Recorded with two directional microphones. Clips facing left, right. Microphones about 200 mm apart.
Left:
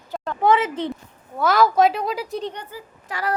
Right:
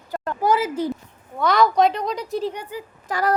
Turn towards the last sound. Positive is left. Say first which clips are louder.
# right 4 dB
turn(degrees=-40)  # may be behind; listen again after turning